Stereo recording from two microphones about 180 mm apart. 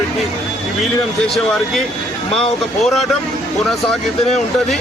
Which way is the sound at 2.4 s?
Centre (ahead or behind).